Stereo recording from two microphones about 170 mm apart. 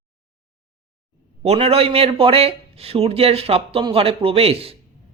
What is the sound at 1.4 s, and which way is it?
A man's voice, 35° right (ahead or behind).